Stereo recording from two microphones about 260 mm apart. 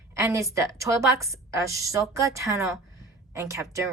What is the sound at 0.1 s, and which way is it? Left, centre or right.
A woman's voice, centre.